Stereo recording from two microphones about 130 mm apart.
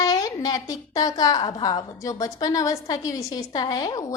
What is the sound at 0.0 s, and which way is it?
A woman's voice, 25° left (ahead or behind).